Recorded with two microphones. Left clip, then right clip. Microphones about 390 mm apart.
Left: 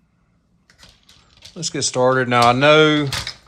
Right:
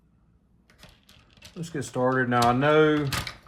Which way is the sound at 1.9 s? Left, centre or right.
Left.